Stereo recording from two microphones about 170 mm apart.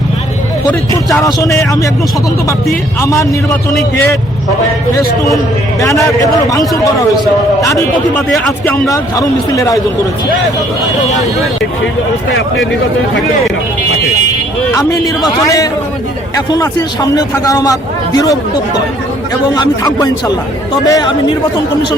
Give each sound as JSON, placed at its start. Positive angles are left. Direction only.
{"t": 1.2, "sound": "a man's voice", "side_deg": 20}
{"t": 3.0, "sound": "a man's voice", "side_deg": 20}
{"t": 5.8, "sound": "a man's voice", "side_deg": 20}
{"t": 8.3, "sound": "speech", "side_deg": 0}
{"t": 8.9, "sound": "a man's voice", "side_deg": 20}
{"t": 14.7, "sound": "a man's voice", "side_deg": 20}